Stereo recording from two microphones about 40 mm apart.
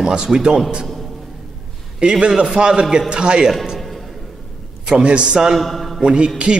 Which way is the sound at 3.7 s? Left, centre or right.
Centre.